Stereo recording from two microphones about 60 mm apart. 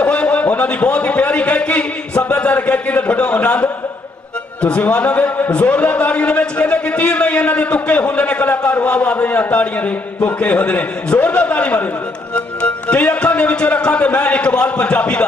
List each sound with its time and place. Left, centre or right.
0.0 s a man's voice: left